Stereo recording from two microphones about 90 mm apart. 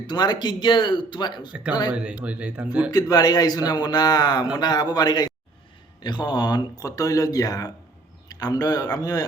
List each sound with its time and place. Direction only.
0.1 s speech: 55° left (ahead or behind)
1.9 s speech: 10° right (ahead or behind)
2.9 s speech: 45° left (ahead or behind)